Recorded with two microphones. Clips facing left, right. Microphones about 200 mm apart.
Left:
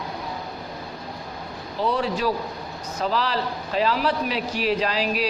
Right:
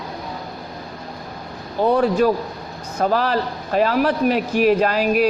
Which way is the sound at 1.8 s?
50° right (ahead or behind).